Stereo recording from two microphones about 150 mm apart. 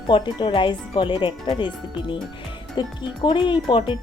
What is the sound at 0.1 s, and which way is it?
Speech, 35° left (ahead or behind).